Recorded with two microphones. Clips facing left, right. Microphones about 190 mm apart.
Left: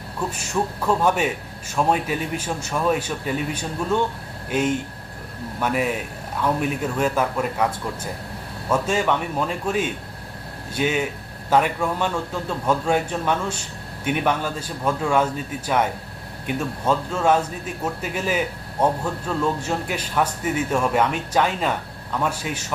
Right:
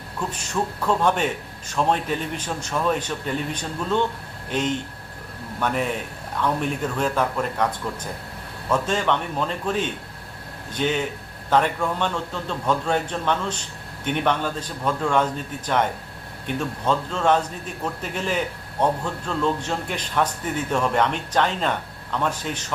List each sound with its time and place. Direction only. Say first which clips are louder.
0.2 s speech: left 2 dB; 10° left (ahead or behind)